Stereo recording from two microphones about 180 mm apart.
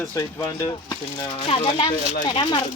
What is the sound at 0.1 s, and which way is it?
Speech, 15° left (ahead or behind).